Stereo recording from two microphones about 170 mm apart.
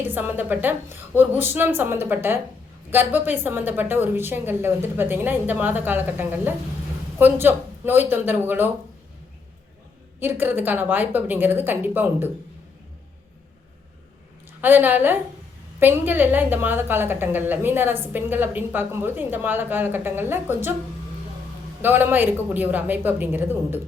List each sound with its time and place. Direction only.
0.1 s a woman's voice: 10° right (ahead or behind)
10.2 s a woman's voice: 10° right (ahead or behind)
14.6 s a woman's voice: 10° right (ahead or behind)
21.8 s a woman's voice: 10° right (ahead or behind)